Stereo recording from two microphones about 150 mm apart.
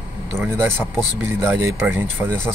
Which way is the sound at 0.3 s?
15° right (ahead or behind).